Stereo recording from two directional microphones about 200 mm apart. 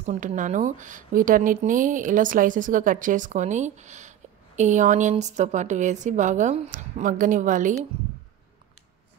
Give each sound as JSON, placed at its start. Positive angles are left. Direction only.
{"t": 0.0, "sound": "speech", "side_deg": -35}